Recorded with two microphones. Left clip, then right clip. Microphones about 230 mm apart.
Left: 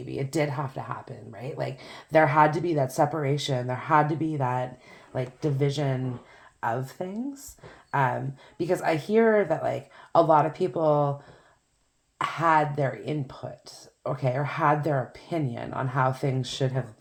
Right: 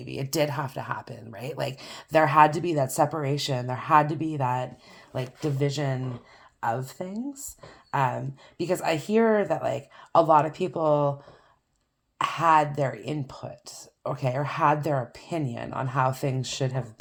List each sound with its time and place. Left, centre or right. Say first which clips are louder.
0.1 s speech: right 1 dB; right
12.1 s speech: right 2 dB; right